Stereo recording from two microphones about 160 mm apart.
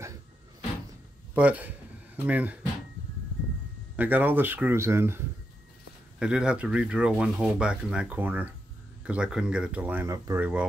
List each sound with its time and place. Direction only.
1.3 s a man's voice: 10° right (ahead or behind)
3.9 s speech: 10° right (ahead or behind)